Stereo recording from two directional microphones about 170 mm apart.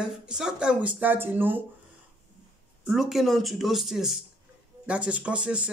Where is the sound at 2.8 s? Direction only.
Centre (ahead or behind).